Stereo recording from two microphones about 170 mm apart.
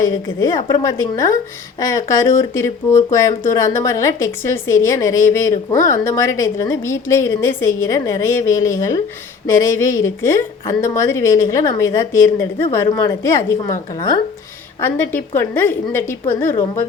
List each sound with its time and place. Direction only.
0.0 s a woman's voice: 20° left (ahead or behind)
14.8 s speech: 10° left (ahead or behind)